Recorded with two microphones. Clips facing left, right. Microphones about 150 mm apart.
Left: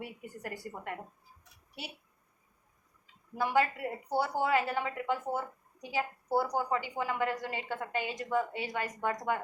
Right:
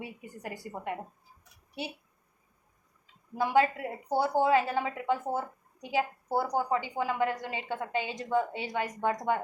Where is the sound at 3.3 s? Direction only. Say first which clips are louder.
Right 3 dB; 20° right (ahead or behind).